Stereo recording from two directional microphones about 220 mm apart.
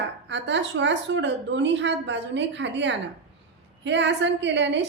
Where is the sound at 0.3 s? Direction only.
55° right (ahead or behind).